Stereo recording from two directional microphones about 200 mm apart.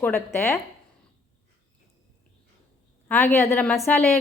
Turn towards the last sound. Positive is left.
turn(degrees=5)  # may be behind; listen again after turning